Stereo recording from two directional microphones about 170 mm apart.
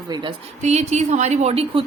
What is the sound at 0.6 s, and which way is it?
A woman's voice, 40° right (ahead or behind).